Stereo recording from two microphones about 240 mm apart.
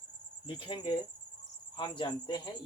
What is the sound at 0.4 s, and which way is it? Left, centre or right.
Speech, left.